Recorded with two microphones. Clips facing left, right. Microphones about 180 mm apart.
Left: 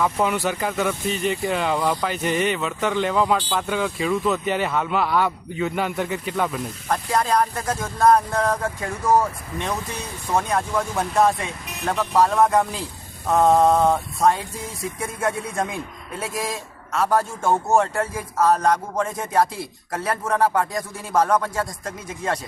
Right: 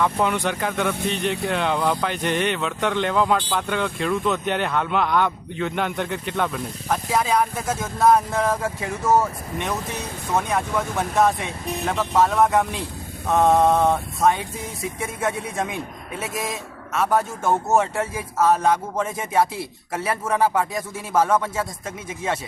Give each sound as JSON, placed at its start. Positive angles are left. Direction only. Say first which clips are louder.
{"t": 0.0, "sound": "speech", "louder": "even", "side_deg": 5}